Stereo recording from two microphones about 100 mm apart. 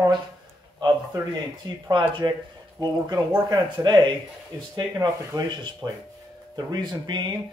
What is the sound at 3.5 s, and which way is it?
Speech, 45° right (ahead or behind).